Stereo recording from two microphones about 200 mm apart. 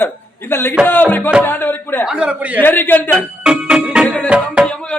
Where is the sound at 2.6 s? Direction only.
10° left (ahead or behind).